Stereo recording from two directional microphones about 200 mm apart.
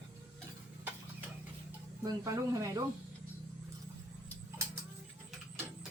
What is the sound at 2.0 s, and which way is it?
Speech, 15° right (ahead or behind).